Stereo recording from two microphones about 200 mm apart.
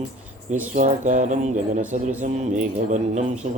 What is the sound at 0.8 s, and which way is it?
Speech, 40° right (ahead or behind).